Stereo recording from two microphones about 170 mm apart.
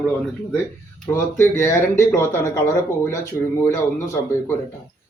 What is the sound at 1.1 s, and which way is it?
Speech, 15° left (ahead or behind).